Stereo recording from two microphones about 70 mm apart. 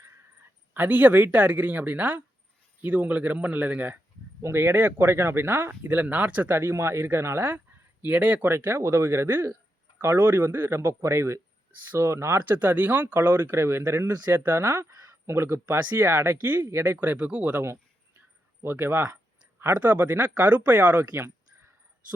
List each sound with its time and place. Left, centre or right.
0.7 s speech: right
4.4 s speech: right
4.7 s speech: right
6.5 s speech: right
8.0 s speech: right
12.4 s speech: right
15.8 s speech: right
18.6 s speech: right